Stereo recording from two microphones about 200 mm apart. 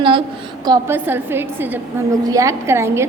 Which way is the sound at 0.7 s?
10° right (ahead or behind).